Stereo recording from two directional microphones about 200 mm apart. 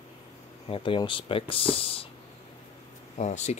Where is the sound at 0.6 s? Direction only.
25° left (ahead or behind).